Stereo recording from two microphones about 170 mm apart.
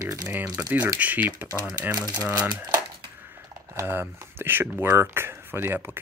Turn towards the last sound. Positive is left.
turn(degrees=-15)  # may be behind; listen again after turning